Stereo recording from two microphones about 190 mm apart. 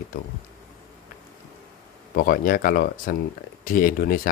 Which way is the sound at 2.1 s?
45° left (ahead or behind).